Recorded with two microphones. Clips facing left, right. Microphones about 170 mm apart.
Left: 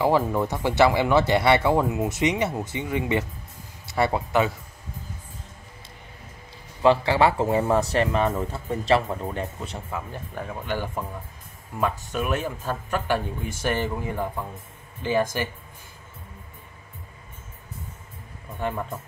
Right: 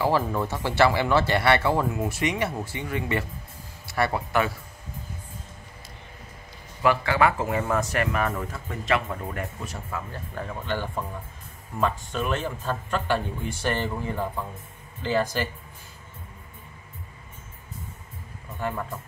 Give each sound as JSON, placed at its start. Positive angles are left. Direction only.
{"t": 0.0, "sound": "speech", "side_deg": 20}
{"t": 6.8, "sound": "speech", "side_deg": 30}
{"t": 9.8, "sound": "speech", "side_deg": 15}
{"t": 18.6, "sound": "speech", "side_deg": 20}